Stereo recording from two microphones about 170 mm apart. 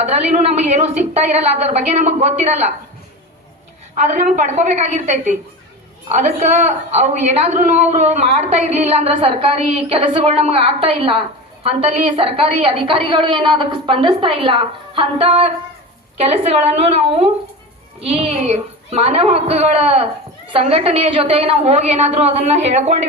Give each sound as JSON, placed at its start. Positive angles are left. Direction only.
{"t": 0.0, "sound": "a woman's voice", "side_deg": -40}
{"t": 3.9, "sound": "a woman's voice", "side_deg": -45}